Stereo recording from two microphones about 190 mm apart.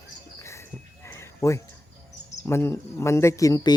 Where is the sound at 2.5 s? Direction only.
15° left (ahead or behind).